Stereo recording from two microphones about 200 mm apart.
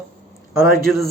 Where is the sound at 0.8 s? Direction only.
Centre (ahead or behind).